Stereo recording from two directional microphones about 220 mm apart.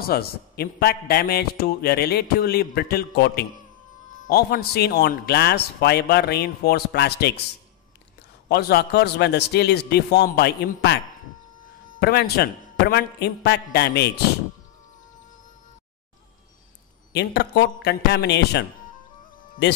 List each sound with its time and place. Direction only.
0.0 s a man's voice: 45° left (ahead or behind)
8.5 s a man's voice: 45° left (ahead or behind)
12.0 s a man's voice: 45° left (ahead or behind)
17.1 s a man's voice: 50° left (ahead or behind)